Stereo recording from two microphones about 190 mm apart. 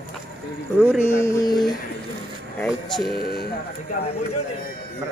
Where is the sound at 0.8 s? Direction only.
10° right (ahead or behind).